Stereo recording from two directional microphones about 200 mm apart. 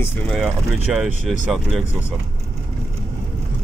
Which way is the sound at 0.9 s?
Centre (ahead or behind).